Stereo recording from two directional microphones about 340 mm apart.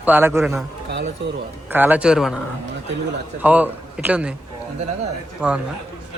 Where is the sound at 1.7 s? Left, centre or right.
Centre.